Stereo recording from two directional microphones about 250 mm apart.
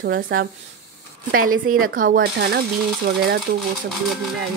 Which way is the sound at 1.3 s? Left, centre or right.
Right.